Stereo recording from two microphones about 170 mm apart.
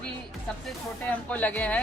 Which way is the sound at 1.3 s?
10° left (ahead or behind).